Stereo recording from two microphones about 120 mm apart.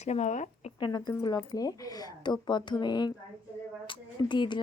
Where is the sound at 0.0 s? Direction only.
75° left (ahead or behind).